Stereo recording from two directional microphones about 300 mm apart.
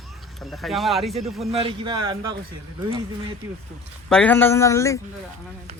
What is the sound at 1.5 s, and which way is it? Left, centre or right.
Speech, centre.